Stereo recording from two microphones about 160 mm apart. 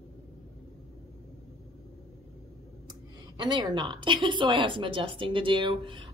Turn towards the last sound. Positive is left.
turn(degrees=-30)  # may be behind; listen again after turning